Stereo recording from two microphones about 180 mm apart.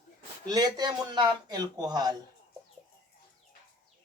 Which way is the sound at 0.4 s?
20° right (ahead or behind).